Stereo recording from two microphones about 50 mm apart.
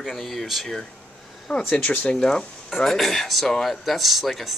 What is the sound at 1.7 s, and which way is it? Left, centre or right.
Speech, left.